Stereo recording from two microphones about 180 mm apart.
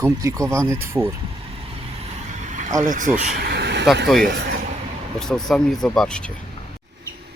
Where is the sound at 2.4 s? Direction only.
45° right (ahead or behind).